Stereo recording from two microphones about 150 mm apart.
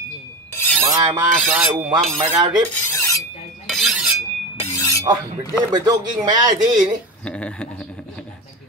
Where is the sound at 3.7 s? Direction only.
Centre (ahead or behind).